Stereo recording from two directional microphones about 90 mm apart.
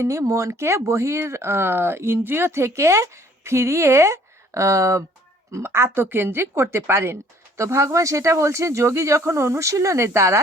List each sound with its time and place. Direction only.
0.0 s a woman's voice: 35° right (ahead or behind)